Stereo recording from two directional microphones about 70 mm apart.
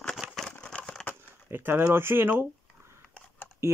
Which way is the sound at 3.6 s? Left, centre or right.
Right.